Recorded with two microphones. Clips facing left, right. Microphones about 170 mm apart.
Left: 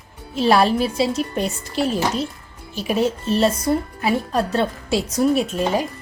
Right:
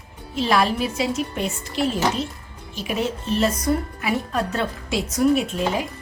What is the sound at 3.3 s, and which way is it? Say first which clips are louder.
Speech: left 1 dB; 30° left (ahead or behind).